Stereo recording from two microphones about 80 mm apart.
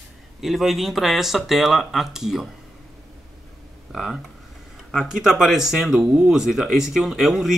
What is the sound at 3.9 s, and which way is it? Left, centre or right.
Speech, centre.